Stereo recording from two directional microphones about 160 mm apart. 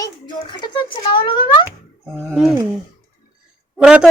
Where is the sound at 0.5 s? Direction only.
30° left (ahead or behind).